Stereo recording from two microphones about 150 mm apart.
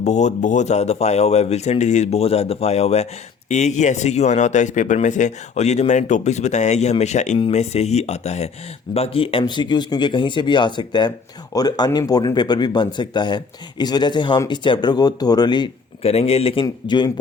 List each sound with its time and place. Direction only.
0.0 s a man's voice: 50° left (ahead or behind); by 15.7 s 30° left (ahead or behind)
16.0 s speech: 40° left (ahead or behind)